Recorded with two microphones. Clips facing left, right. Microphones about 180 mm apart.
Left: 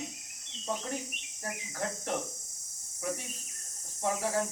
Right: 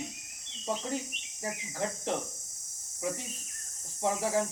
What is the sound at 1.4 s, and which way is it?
Speech, 10° right (ahead or behind).